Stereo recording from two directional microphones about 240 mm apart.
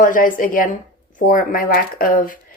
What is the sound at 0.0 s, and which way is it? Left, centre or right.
A woman's voice, left.